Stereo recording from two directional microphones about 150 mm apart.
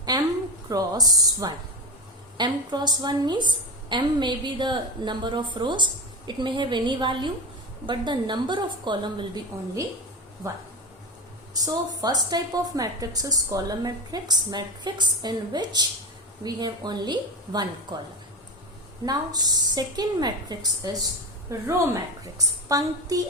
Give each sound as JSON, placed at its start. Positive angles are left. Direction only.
{"t": 0.1, "sound": "a sound", "side_deg": -25}
{"t": 0.7, "sound": "a woman's voice", "side_deg": -25}
{"t": 19.0, "sound": "a woman's voice", "side_deg": -25}